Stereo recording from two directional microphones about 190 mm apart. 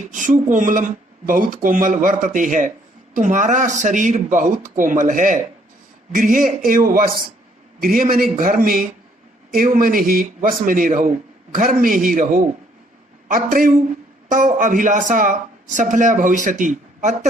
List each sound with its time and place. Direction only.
0.0 s speech: 45° right (ahead or behind)